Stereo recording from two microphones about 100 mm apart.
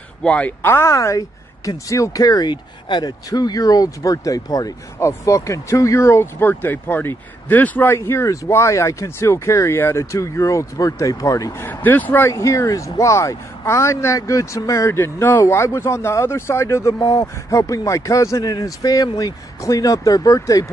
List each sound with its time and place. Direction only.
0.2 s speech: 10° left (ahead or behind); by 11.5 s 35° left (ahead or behind)
11.6 s speech: 20° left (ahead or behind)
12.4 s speech: 30° left (ahead or behind)